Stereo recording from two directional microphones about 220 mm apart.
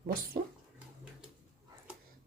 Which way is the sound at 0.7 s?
5° right (ahead or behind).